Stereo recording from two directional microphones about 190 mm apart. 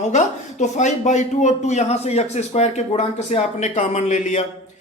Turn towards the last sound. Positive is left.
turn(degrees=40)  # may be behind; listen again after turning